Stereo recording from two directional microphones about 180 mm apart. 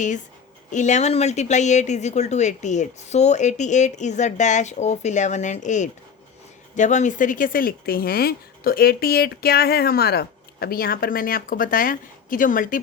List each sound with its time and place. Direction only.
0.7 s speech: 40° left (ahead or behind)